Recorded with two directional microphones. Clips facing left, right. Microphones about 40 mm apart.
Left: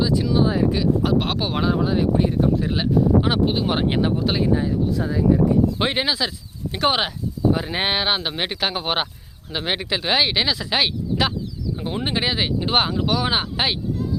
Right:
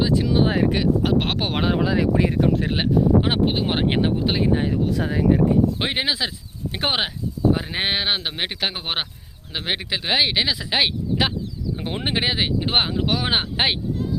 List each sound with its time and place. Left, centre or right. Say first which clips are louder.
0.0 s speech: even; right
0.4 s speech: even; right
1.5 s speech: even; right
1.8 s speech: even; right
2.6 s speech: even; right
3.2 s speech: left 1 dB; right
4.5 s speech: even; right
5.8 s speech: left 2 dB; centre
6.1 s speech: left 1 dB; centre
7.5 s speech: left 1 dB; centre
11.8 s speech: left 1 dB; right
12.1 s speech: right 1 dB; centre
13.1 s speech: left 1 dB; right